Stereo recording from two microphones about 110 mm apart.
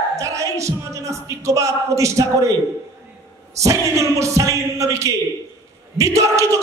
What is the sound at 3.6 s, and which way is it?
Speech, 30° right (ahead or behind).